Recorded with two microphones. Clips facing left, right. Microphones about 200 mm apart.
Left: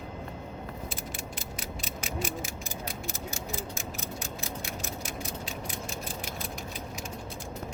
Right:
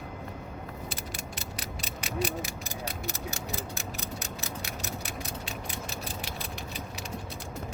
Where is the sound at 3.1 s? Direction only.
70° right (ahead or behind).